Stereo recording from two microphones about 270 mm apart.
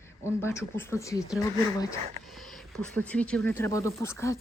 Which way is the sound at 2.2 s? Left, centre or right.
Centre.